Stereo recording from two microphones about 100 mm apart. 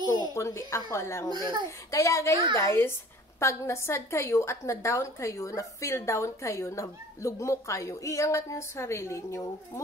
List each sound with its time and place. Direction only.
0.3 s a woman's voice: 30° left (ahead or behind)